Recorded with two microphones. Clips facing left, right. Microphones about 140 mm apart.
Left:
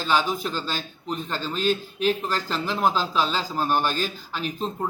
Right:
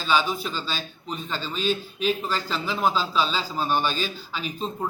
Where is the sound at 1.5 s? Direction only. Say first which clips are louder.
Left 2 dB; 15° right (ahead or behind).